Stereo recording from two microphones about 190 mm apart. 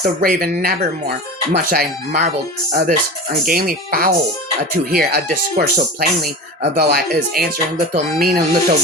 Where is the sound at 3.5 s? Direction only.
50° right (ahead or behind).